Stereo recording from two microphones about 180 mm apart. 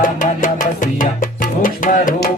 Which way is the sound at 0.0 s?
45° left (ahead or behind).